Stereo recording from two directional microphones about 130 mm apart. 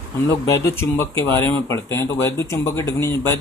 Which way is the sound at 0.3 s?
25° left (ahead or behind).